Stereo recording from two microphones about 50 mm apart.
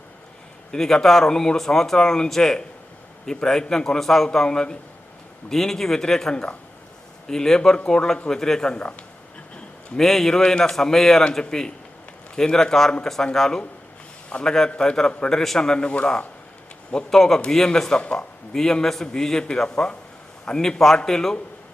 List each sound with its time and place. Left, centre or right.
0.7 s speech: centre
6.3 s speech: left
10.0 s speech: centre
16.9 s speech: centre
18.0 s speech: left
18.5 s speech: centre